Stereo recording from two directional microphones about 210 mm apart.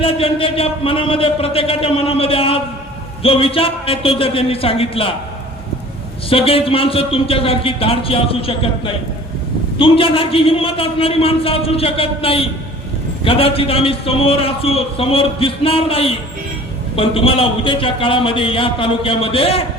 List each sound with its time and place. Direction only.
0.0 s a man's voice: 25° left (ahead or behind)
6.3 s a man's voice: 25° left (ahead or behind)